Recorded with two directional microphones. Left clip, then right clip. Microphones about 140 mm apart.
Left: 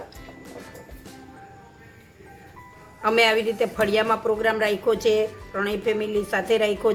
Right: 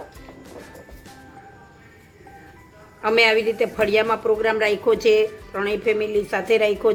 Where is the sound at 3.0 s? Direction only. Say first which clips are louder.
Right 2 dB; 25° right (ahead or behind).